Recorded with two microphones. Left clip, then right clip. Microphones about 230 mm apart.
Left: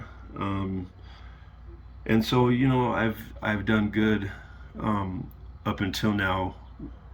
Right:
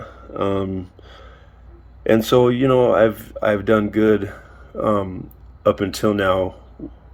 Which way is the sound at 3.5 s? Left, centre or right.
Right.